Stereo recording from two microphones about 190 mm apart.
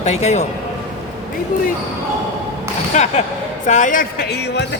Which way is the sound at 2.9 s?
35° left (ahead or behind).